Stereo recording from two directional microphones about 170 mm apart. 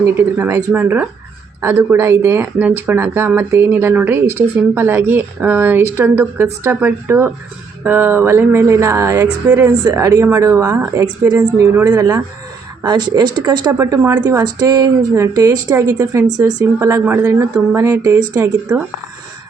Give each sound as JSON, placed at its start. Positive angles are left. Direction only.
{"t": 0.0, "sound": "a woman's voice", "side_deg": -10}